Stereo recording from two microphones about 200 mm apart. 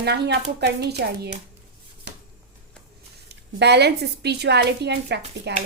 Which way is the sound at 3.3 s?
55° right (ahead or behind).